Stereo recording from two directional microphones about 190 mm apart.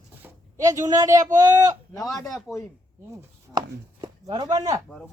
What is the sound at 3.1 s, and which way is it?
Speech, 20° right (ahead or behind).